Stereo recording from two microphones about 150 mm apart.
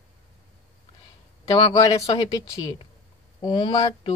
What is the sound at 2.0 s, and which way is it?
Speech, 40° left (ahead or behind).